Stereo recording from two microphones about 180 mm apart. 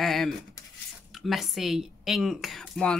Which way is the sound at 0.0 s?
Centre (ahead or behind).